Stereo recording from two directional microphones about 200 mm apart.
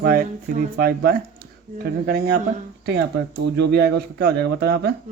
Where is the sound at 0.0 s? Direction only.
45° right (ahead or behind).